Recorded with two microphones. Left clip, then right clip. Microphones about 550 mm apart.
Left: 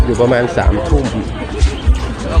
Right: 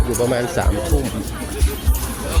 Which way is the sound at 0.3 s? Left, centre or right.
Right.